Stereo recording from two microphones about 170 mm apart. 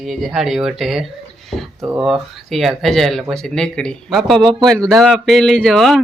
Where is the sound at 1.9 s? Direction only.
Centre (ahead or behind).